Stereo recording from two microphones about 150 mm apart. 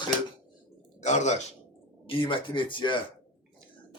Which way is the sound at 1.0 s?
50° left (ahead or behind).